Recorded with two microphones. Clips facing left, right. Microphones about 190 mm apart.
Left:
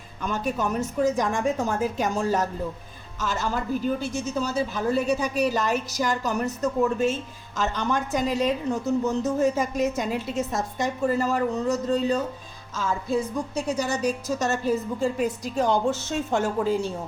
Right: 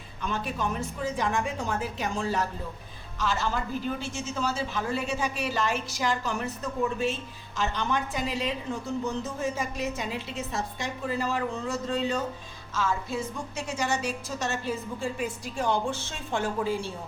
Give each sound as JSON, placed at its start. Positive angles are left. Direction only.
{"t": 0.3, "sound": "a woman's voice", "side_deg": 45}
{"t": 13.7, "sound": "a woman's voice", "side_deg": 40}